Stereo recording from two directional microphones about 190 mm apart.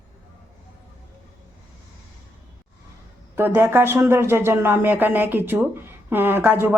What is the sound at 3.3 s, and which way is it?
Speech, 10° right (ahead or behind).